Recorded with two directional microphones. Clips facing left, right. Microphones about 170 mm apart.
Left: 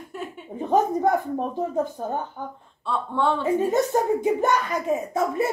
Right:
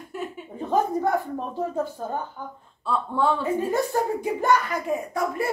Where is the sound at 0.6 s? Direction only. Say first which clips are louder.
Left 2 dB; 20° left (ahead or behind).